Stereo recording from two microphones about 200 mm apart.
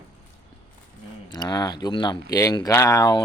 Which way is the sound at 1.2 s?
20° left (ahead or behind).